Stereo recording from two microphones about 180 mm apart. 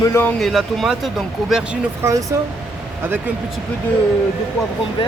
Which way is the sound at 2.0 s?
15° right (ahead or behind).